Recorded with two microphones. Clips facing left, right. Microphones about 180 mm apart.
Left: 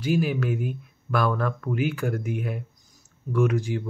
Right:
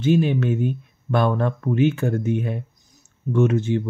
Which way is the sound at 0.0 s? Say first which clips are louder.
Right 5 dB; 25° right (ahead or behind).